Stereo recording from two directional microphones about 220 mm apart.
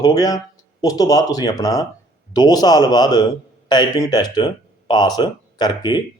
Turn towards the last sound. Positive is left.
turn(degrees=20)  # may be behind; listen again after turning